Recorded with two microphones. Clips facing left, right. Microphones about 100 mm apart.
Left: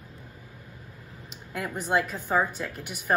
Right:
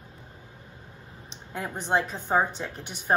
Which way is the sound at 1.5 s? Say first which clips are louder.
Even; 30° right (ahead or behind).